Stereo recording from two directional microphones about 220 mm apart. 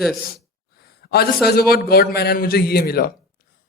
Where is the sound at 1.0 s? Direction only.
45° left (ahead or behind).